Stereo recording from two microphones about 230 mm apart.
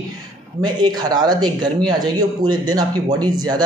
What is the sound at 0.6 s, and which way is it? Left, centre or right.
Speech, centre.